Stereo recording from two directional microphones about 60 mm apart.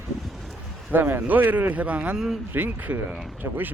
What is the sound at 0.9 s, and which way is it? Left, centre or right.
Speech, right.